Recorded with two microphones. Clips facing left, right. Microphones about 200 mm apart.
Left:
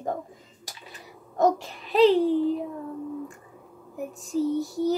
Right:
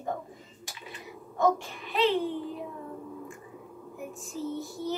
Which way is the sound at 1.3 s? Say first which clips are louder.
Left 3 dB; 40° left (ahead or behind).